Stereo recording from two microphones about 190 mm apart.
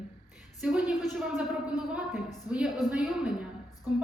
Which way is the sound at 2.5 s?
5° right (ahead or behind).